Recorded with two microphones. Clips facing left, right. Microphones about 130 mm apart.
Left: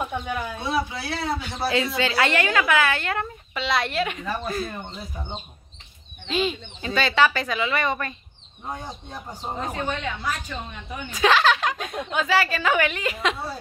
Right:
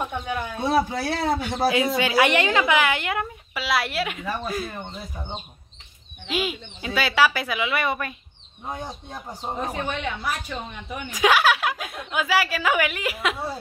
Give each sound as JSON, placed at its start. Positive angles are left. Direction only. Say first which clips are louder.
{"t": 0.0, "sound": "speech", "louder": "even", "side_deg": 0}
{"t": 0.6, "sound": "speech", "louder": "right 8 dB", "side_deg": -45}
{"t": 2.0, "sound": "a woman's voice", "louder": "right 2 dB", "side_deg": -15}
{"t": 6.2, "sound": "a woman's voice", "louder": "left 2 dB", "side_deg": -10}